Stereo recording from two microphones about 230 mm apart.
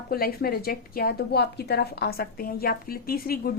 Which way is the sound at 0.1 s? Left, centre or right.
Left.